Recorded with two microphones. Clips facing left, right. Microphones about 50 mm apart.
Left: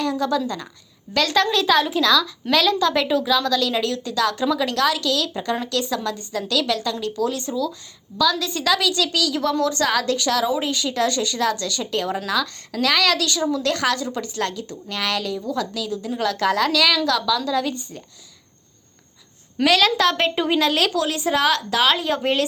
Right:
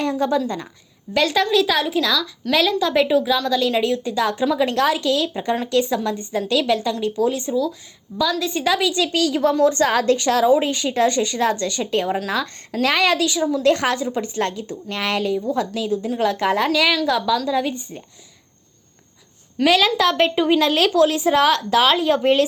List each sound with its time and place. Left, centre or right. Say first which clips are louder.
0.0 s a woman's voice: right 2 dB; right
1.1 s a woman's voice: right 2 dB; centre
19.6 s a woman's voice: right 1 dB; centre
20.9 s a woman's voice: right 5 dB; right